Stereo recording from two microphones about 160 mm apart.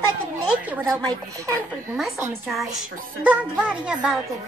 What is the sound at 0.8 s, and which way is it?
Speech, 20° right (ahead or behind).